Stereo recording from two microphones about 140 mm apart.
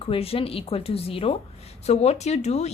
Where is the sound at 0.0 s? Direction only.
40° left (ahead or behind).